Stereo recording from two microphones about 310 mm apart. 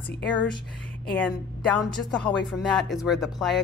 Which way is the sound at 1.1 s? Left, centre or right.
Centre.